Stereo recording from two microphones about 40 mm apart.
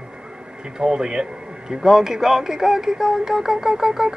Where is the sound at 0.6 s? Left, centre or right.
Centre.